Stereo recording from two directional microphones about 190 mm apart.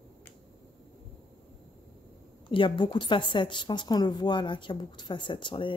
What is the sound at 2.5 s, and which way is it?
A woman's voice, 25° left (ahead or behind).